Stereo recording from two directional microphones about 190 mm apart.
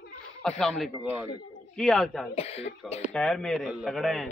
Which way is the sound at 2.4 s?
35° left (ahead or behind).